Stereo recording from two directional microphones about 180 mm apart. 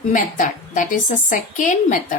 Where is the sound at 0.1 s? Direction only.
45° left (ahead or behind).